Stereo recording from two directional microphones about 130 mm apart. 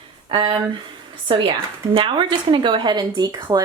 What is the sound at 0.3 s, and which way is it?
Speech, 35° right (ahead or behind).